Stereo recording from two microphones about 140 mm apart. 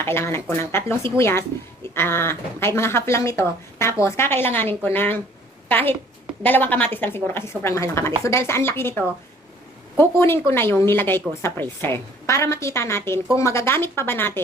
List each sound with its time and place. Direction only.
0.0 s a woman's voice: 15° left (ahead or behind)